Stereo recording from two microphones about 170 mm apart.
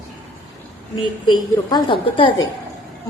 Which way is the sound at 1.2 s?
25° left (ahead or behind).